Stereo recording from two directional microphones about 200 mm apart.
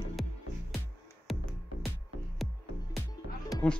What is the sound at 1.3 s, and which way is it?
Music, centre (ahead or behind).